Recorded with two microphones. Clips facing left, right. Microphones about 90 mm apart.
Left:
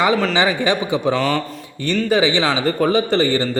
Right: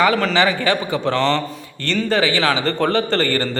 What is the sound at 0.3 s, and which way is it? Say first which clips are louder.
A man's voice: even; 20° left (ahead or behind).